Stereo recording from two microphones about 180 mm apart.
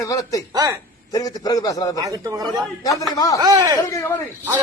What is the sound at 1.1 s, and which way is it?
Speech, 20° left (ahead or behind).